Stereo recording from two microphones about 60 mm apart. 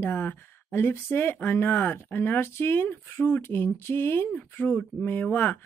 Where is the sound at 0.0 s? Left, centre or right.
Left.